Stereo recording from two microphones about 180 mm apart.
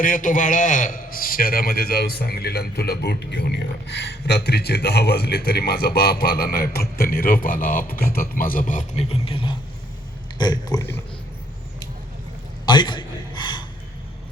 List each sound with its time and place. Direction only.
0.0 s a man's voice: 45° left (ahead or behind); by 9.6 s 30° left (ahead or behind)
10.3 s pig: 25° left (ahead or behind)
12.6 s a sound: 25° left (ahead or behind)